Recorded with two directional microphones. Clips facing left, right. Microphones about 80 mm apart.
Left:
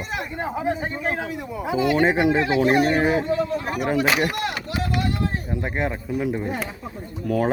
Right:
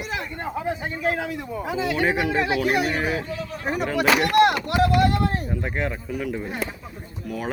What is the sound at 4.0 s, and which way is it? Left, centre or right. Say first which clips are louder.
Speech: right 7 dB; right.